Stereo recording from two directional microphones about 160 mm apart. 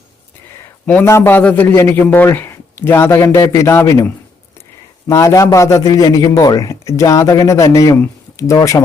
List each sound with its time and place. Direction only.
0.9 s a man's voice: 15° left (ahead or behind)